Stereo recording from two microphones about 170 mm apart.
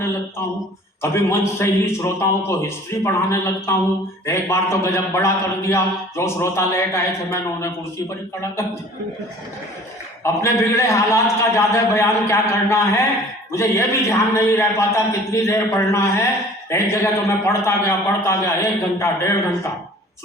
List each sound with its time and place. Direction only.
1.0 s a man's voice: 15° left (ahead or behind)
10.4 s a man's voice: 15° left (ahead or behind)